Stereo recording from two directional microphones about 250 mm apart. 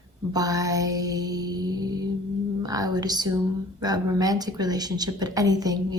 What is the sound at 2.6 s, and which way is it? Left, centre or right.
A woman's voice, centre.